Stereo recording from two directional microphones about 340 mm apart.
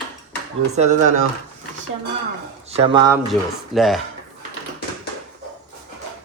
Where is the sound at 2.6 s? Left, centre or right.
Centre.